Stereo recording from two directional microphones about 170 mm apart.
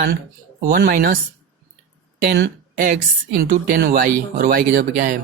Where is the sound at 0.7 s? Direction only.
60° right (ahead or behind).